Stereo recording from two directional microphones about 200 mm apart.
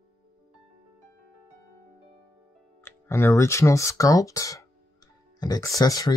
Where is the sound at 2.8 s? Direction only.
10° left (ahead or behind).